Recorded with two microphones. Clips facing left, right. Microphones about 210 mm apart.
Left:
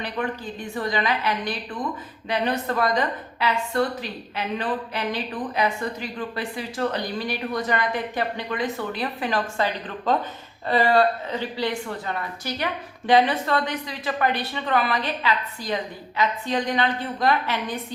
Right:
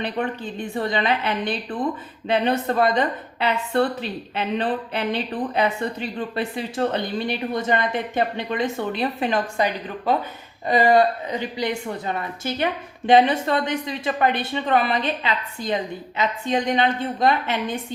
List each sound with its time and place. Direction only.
0.7 s a woman's voice: 25° right (ahead or behind)